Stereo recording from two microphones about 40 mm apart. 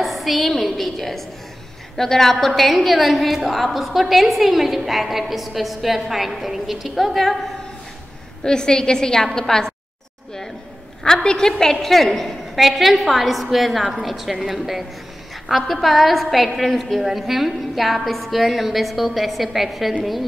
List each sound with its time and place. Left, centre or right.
0.0 s a woman's voice: centre
8.5 s a woman's voice: centre
11.2 s a woman's voice: centre